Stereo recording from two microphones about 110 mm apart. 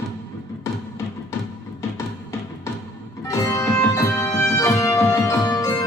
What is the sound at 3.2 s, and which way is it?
Music, 30° left (ahead or behind).